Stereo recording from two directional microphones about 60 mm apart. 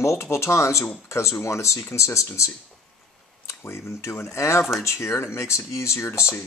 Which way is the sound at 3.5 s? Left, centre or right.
Left.